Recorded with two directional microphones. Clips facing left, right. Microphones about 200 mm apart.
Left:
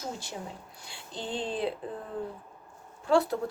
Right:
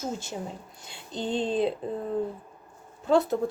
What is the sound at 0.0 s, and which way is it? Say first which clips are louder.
Speech: right 5 dB; 25° right (ahead or behind).